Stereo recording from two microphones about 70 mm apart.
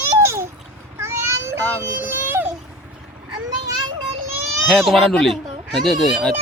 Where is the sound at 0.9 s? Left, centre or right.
Right.